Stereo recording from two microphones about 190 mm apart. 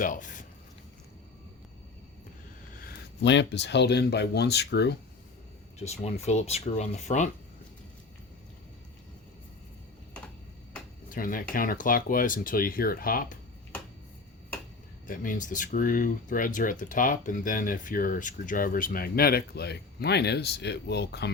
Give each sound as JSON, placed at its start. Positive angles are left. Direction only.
{"t": 0.0, "sound": "speech", "side_deg": 45}
{"t": 2.8, "sound": "speech", "side_deg": 65}
{"t": 5.8, "sound": "speech", "side_deg": 35}
{"t": 11.1, "sound": "speech", "side_deg": 45}
{"t": 15.0, "sound": "speech", "side_deg": 45}